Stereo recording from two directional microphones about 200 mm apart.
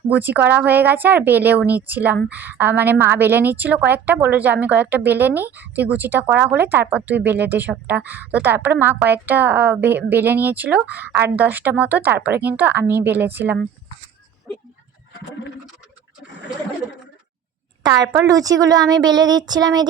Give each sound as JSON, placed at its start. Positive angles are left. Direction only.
{"t": 0.1, "sound": "a woman's voice", "side_deg": -10}
{"t": 17.8, "sound": "a woman's voice", "side_deg": -20}